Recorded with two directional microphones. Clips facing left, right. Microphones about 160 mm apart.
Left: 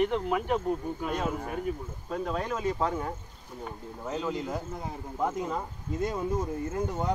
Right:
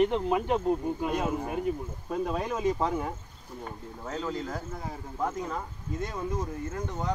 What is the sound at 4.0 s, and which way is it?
Speech, 5° left (ahead or behind).